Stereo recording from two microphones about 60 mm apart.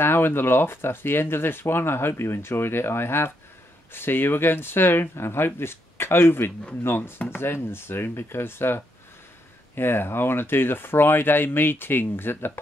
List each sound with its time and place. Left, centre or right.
0.0 s speech: left